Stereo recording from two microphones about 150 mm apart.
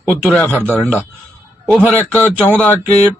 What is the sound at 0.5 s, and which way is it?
Speech, 15° right (ahead or behind).